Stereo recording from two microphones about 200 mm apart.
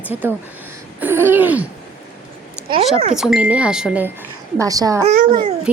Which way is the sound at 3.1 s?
Centre (ahead or behind).